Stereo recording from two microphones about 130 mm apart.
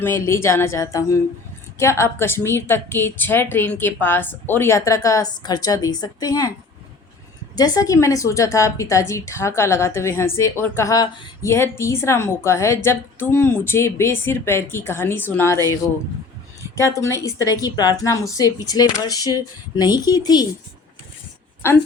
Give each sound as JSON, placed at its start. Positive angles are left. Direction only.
{"t": 0.0, "sound": "a woman's voice", "side_deg": 20}
{"t": 7.5, "sound": "a woman's voice", "side_deg": 30}
{"t": 16.7, "sound": "a woman's voice", "side_deg": 25}
{"t": 21.6, "sound": "a woman's voice", "side_deg": 20}